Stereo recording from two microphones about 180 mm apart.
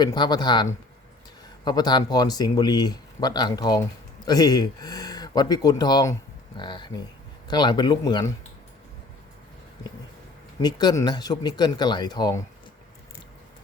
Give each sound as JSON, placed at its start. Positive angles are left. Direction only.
{"t": 0.0, "sound": "speech", "side_deg": 25}
{"t": 10.6, "sound": "speech", "side_deg": 25}